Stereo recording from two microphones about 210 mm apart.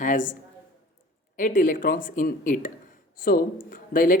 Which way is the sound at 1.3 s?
40° left (ahead or behind).